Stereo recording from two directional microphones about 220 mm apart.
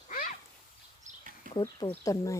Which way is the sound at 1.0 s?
40° right (ahead or behind).